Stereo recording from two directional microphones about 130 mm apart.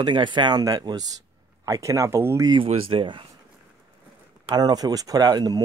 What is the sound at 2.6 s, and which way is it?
Speech, 45° right (ahead or behind).